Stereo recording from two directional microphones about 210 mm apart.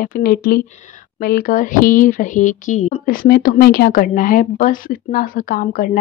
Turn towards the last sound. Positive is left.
turn(degrees=40)  # may be behind; listen again after turning